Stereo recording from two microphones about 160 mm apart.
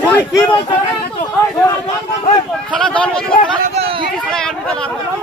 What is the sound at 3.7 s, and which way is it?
Speech, 35° right (ahead or behind).